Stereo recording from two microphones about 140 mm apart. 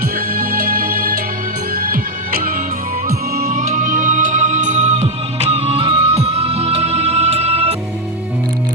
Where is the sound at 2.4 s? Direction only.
75° right (ahead or behind); by 7.8 s 50° right (ahead or behind).